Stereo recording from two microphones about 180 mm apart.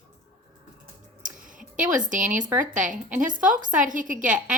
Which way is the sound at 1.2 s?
45° right (ahead or behind).